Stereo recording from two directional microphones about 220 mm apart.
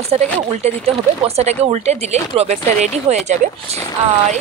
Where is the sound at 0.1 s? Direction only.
30° right (ahead or behind).